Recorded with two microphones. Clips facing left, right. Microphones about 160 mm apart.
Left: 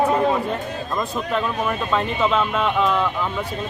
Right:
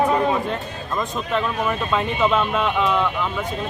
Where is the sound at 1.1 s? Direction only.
Centre (ahead or behind).